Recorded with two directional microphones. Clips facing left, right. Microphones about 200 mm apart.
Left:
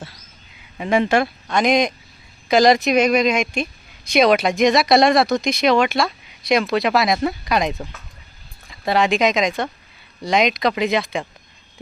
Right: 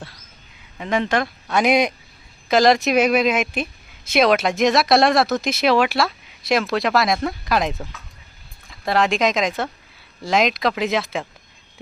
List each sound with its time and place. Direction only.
0.8 s speech: 10° left (ahead or behind)
1.5 s speech: 5° right (ahead or behind)